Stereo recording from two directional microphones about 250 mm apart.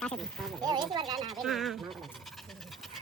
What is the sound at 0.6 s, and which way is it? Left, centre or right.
Speech, centre.